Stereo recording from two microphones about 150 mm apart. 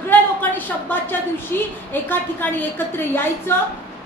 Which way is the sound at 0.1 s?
10° left (ahead or behind).